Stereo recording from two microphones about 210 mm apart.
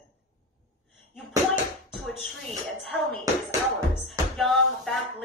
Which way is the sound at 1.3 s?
20° right (ahead or behind).